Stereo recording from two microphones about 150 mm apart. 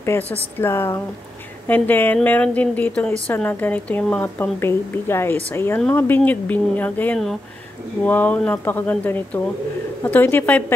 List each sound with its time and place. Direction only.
0.0 s speech: 15° left (ahead or behind)